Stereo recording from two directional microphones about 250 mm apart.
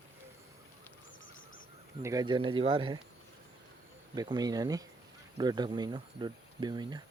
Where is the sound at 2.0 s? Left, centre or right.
Centre.